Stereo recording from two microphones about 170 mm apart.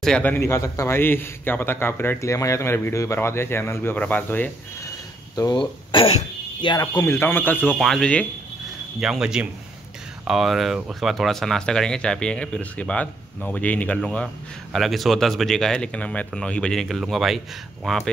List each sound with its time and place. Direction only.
0.0 s a man's voice: 5° left (ahead or behind)
5.3 s speech: 25° left (ahead or behind)
6.9 s a man's voice: 15° left (ahead or behind)